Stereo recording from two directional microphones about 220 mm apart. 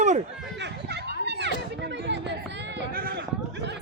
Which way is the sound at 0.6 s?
50° right (ahead or behind).